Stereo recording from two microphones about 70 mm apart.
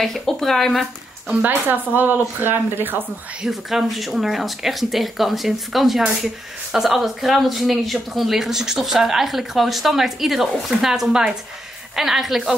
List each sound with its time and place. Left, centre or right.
0.0 s speech: centre
1.3 s speech: right
3.4 s speech: centre